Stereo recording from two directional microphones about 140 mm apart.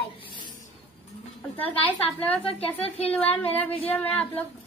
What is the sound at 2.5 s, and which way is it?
Speech, 45° left (ahead or behind).